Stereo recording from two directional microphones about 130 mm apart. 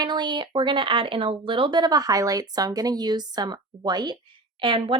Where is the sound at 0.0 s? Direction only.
35° right (ahead or behind).